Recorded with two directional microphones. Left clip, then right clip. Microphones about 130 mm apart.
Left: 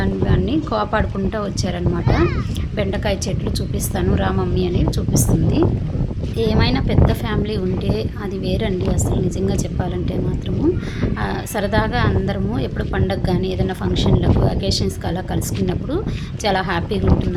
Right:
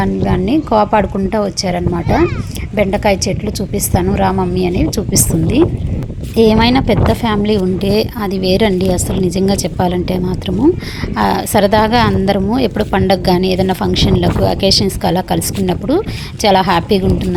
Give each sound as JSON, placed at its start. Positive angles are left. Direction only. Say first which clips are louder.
{"t": 0.0, "sound": "a woman's voice", "louder": "right 5 dB", "side_deg": -35}
{"t": 6.3, "sound": "speech", "louder": "right 10 dB", "side_deg": -55}
{"t": 11.2, "sound": "speech", "louder": "right 13 dB", "side_deg": -45}